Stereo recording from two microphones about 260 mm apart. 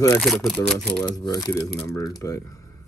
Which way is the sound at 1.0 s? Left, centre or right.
Centre.